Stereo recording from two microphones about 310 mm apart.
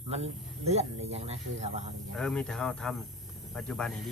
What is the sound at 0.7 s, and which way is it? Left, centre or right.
Speech, centre.